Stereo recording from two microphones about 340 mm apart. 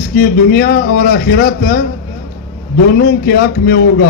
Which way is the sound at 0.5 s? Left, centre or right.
Left.